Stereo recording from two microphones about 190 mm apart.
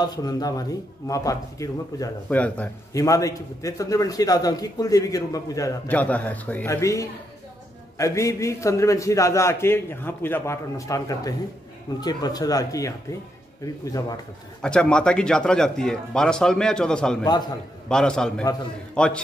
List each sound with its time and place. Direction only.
0.0 s speech: 20° left (ahead or behind)
2.2 s a man's voice: 5° left (ahead or behind)
14.6 s speech: 5° left (ahead or behind)
17.2 s speech: 20° left (ahead or behind)
17.8 s speech: 5° left (ahead or behind)